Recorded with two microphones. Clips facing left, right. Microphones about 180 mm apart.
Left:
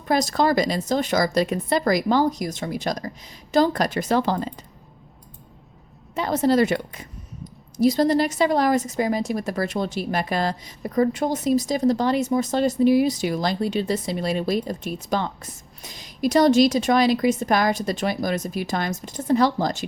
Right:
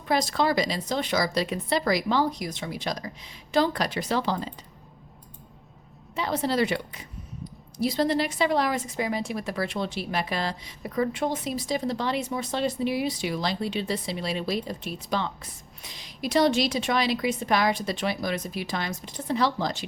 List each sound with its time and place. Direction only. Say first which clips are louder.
0.0 s a woman's voice: left 4 dB; 45° left (ahead or behind)
6.1 s a woman's voice: left 6 dB; 45° left (ahead or behind)